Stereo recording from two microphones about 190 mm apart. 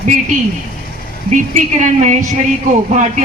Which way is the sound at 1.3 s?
40° right (ahead or behind).